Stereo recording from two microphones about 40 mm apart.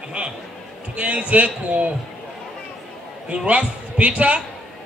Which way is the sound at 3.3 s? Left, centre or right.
Right.